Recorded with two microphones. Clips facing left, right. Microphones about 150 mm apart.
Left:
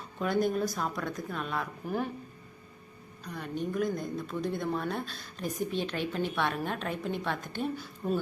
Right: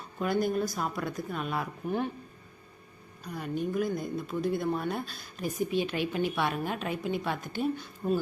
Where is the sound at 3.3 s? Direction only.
10° right (ahead or behind).